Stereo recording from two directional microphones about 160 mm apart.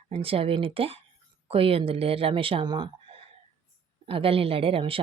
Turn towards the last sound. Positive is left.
turn(degrees=-35)  # may be behind; listen again after turning